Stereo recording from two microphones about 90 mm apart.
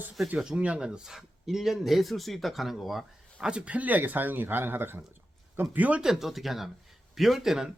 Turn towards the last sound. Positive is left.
turn(degrees=-5)  # may be behind; listen again after turning